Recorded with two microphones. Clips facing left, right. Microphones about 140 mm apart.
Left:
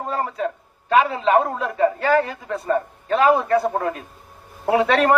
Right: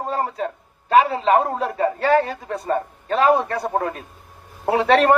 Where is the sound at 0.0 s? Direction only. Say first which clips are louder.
Even; 35° right (ahead or behind).